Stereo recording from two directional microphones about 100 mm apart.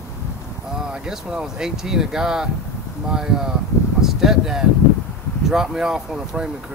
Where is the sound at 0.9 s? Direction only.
5° right (ahead or behind).